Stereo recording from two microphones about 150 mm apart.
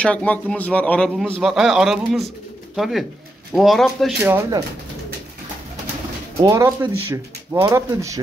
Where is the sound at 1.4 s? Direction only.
5° right (ahead or behind).